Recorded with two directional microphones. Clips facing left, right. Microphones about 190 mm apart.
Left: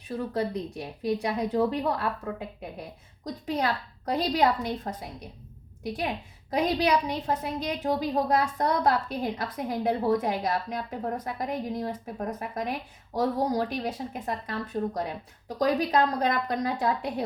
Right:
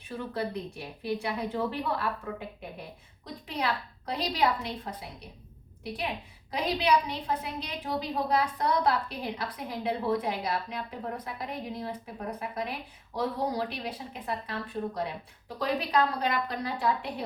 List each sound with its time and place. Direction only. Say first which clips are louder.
0.1 s a woman's voice: left 4 dB; 35° left (ahead or behind)
6.5 s a woman's voice: left 2 dB; 45° left (ahead or behind)